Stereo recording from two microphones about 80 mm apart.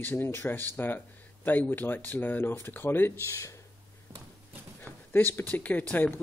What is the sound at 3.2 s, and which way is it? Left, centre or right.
Speech, left.